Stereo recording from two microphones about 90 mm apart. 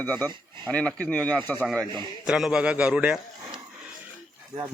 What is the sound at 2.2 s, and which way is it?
Speech, 10° right (ahead or behind).